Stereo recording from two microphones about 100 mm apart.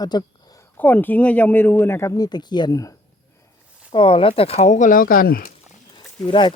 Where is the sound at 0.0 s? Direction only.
45° left (ahead or behind).